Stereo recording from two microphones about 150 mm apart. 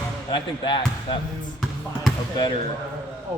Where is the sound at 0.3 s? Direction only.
30° left (ahead or behind).